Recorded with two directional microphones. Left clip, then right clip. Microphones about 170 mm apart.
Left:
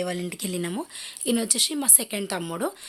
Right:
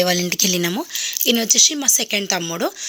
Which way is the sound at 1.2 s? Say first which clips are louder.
Right 9 dB; 10° right (ahead or behind).